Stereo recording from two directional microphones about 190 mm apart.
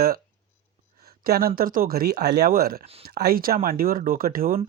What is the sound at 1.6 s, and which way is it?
Speech, 50° right (ahead or behind).